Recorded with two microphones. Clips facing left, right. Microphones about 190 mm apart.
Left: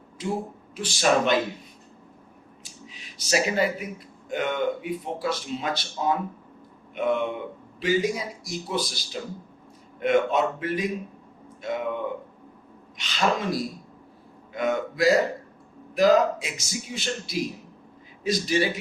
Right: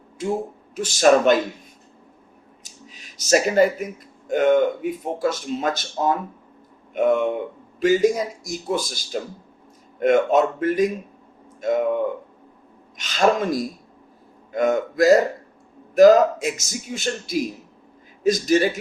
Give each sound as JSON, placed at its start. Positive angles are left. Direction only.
{"t": 0.2, "sound": "speech", "side_deg": -50}
{"t": 2.6, "sound": "speech", "side_deg": -45}
{"t": 13.0, "sound": "speech", "side_deg": -45}